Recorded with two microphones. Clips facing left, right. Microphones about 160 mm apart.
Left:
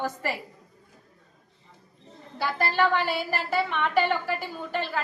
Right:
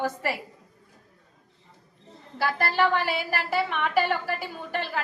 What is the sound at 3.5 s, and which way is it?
Speech, 5° right (ahead or behind).